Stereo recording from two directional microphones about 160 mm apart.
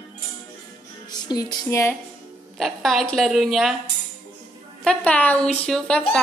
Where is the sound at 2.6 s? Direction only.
Centre (ahead or behind).